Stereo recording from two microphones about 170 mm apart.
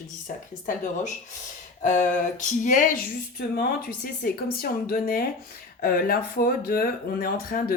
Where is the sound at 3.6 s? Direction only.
60° left (ahead or behind).